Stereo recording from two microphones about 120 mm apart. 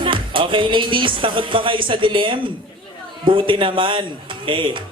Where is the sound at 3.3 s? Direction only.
45° right (ahead or behind).